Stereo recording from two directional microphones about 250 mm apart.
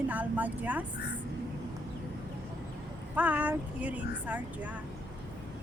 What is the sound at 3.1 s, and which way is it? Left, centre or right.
Speech, centre.